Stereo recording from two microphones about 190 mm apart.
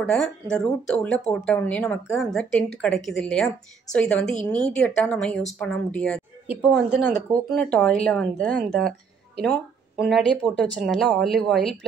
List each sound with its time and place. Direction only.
0.0 s speech: 5° left (ahead or behind)